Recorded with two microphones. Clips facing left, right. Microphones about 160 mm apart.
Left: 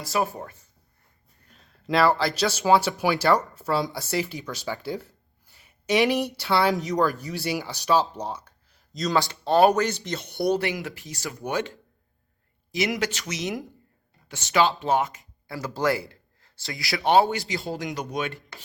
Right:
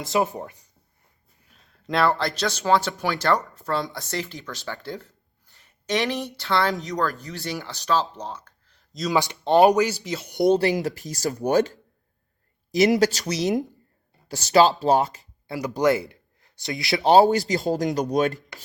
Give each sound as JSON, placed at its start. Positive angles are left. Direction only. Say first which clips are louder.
{"t": 0.0, "sound": "speech", "louder": "right 3 dB", "side_deg": -20}
{"t": 1.5, "sound": "speech", "louder": "left 2 dB", "side_deg": 0}
{"t": 8.1, "sound": "a sound", "louder": "left 2 dB", "side_deg": 10}
{"t": 9.1, "sound": "speech", "louder": "right 3 dB", "side_deg": -20}
{"t": 10.4, "sound": "speech", "louder": "right 6 dB", "side_deg": -30}
{"t": 13.0, "sound": "speech", "louder": "right 7 dB", "side_deg": -40}
{"t": 15.5, "sound": "speech", "louder": "right 4 dB", "side_deg": -20}